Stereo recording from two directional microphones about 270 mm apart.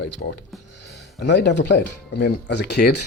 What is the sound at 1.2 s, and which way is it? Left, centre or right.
Speech, left.